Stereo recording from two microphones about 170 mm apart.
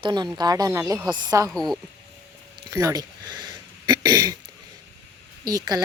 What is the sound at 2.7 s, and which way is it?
Throat clearing, 20° right (ahead or behind).